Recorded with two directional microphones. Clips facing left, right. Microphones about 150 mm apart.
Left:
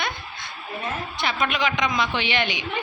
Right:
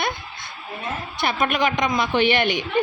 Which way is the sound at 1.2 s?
50° right (ahead or behind).